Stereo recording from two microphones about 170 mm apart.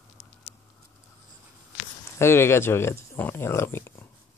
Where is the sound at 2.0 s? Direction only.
15° left (ahead or behind).